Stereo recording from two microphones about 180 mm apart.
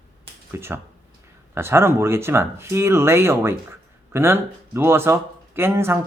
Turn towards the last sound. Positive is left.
turn(degrees=-15)  # may be behind; listen again after turning